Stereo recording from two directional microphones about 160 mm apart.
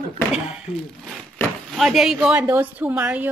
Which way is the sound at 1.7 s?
Centre (ahead or behind).